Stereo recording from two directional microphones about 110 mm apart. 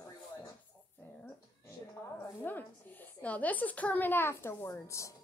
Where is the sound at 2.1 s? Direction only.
15° left (ahead or behind).